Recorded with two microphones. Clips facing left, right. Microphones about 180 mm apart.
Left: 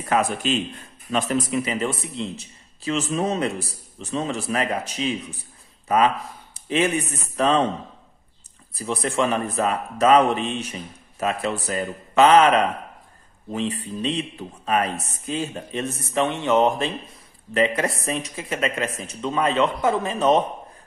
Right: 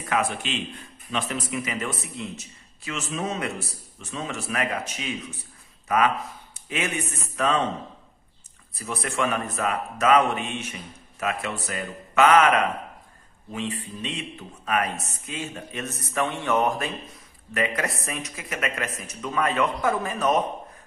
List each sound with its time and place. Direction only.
0.1 s a man's voice: 40° left (ahead or behind)
8.7 s a man's voice: 30° left (ahead or behind)